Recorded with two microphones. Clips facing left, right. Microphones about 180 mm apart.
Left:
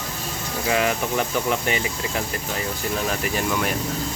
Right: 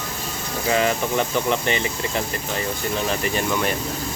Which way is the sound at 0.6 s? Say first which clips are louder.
Right 2 dB; 5° left (ahead or behind).